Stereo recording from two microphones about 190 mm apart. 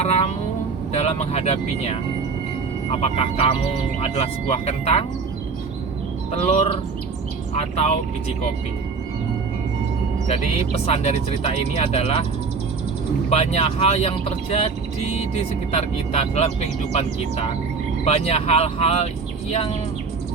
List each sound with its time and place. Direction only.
0.0 s speech: 35° left (ahead or behind)
6.3 s speech: 35° left (ahead or behind)
10.8 s speech: 35° left (ahead or behind)
13.3 s speech: 35° left (ahead or behind)
15.7 s speech: 35° left (ahead or behind)